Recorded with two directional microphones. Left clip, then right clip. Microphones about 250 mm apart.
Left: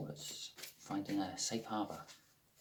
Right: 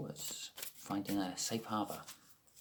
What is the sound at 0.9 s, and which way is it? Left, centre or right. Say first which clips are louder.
Speech: right 1 dB; right.